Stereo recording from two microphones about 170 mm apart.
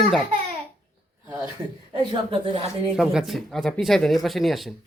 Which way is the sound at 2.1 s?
30° right (ahead or behind).